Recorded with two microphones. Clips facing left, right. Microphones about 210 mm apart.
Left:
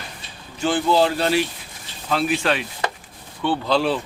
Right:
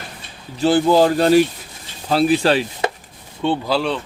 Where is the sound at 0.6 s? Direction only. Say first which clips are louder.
Right 5 dB; 40° right (ahead or behind).